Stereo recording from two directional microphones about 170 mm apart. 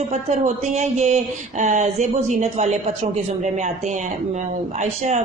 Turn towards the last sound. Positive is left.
turn(degrees=-45)  # may be behind; listen again after turning